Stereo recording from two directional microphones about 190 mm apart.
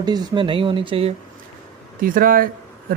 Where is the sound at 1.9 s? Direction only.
45° right (ahead or behind).